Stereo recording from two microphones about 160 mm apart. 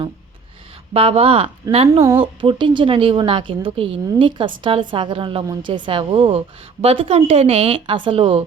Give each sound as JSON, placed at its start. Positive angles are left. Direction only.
{"t": 0.9, "sound": "a woman's voice", "side_deg": -35}